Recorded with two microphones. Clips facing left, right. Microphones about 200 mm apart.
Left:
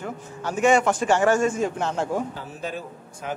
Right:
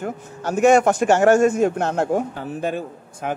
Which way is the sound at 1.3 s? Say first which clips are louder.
Right 6 dB; 65° right (ahead or behind).